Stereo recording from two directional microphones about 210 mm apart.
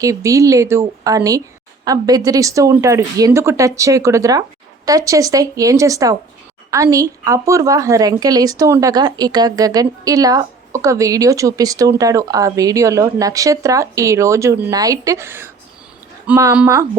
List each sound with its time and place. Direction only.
0.0 s speech: 15° right (ahead or behind)